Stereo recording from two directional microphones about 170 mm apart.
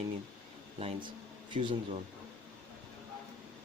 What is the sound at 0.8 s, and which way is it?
Speech, 30° right (ahead or behind).